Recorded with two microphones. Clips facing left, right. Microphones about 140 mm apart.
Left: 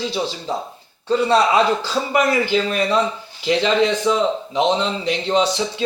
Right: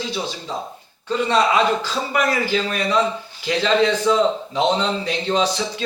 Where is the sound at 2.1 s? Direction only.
25° left (ahead or behind).